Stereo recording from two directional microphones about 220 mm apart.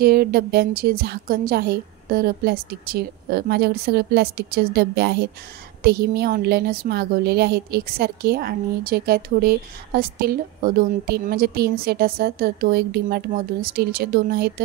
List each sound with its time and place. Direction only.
0.0 s a woman's voice: 45° right (ahead or behind)